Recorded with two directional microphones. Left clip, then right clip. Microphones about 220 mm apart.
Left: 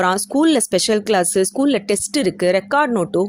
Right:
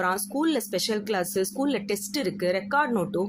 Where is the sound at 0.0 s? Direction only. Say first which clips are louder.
Left 9 dB; 35° left (ahead or behind).